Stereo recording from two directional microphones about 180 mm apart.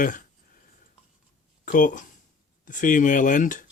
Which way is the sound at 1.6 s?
50° left (ahead or behind).